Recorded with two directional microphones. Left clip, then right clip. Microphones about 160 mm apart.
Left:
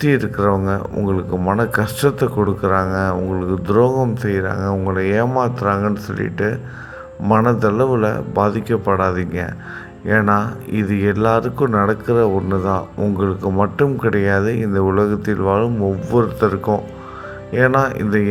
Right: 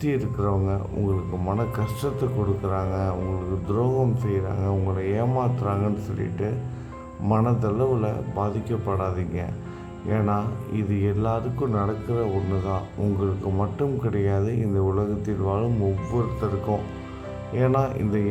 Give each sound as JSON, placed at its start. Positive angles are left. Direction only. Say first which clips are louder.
{"t": 0.0, "sound": "speech", "louder": "left 10 dB", "side_deg": 10}
{"t": 16.7, "sound": "speech", "louder": "left 8 dB", "side_deg": 55}
{"t": 17.5, "sound": "speech", "louder": "left 9 dB", "side_deg": 10}